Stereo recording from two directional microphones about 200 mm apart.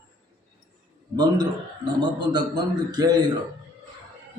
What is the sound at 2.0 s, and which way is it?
A man's voice, 20° right (ahead or behind).